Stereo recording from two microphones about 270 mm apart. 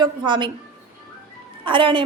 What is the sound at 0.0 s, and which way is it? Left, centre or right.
Speech, centre.